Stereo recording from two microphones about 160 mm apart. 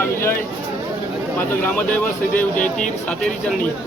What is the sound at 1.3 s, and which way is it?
Speech, 10° left (ahead or behind).